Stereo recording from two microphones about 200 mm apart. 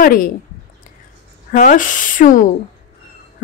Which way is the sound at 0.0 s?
45° left (ahead or behind).